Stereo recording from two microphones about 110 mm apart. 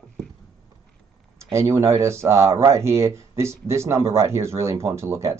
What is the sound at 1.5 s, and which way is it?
Speech, 25° right (ahead or behind).